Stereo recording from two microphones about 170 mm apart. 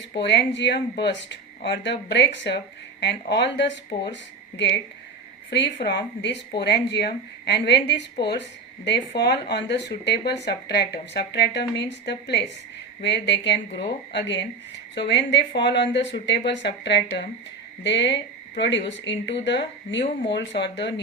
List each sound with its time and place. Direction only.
0.1 s speech: 90° left
5.8 s speech: 75° left (ahead or behind)